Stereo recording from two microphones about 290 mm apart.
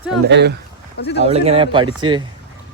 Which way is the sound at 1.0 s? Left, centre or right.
Left.